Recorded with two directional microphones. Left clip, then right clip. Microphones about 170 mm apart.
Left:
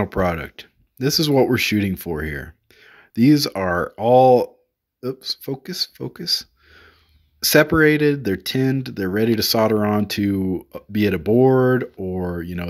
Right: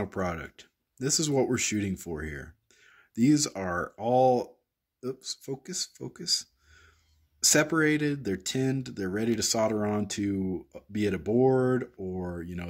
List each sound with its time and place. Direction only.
0.0 s speech: 30° left (ahead or behind)